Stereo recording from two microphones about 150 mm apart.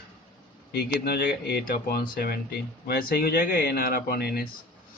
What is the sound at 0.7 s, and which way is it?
Speech, 90° left.